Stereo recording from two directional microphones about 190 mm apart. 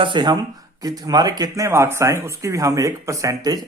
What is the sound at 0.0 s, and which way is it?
Speech, 25° right (ahead or behind).